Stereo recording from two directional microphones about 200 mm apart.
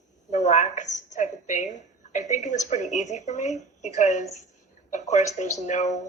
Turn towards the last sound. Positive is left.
turn(degrees=35)  # may be behind; listen again after turning